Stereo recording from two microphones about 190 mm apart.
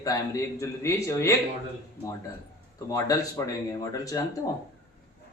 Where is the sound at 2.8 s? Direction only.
20° left (ahead or behind).